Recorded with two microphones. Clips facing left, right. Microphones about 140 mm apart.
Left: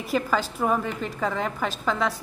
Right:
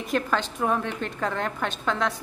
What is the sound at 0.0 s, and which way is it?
A woman's voice, 5° left (ahead or behind).